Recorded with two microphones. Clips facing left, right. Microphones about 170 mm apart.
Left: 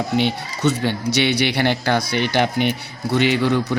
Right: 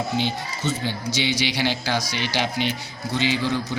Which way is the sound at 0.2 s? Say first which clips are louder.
Left 6 dB; 70° left (ahead or behind).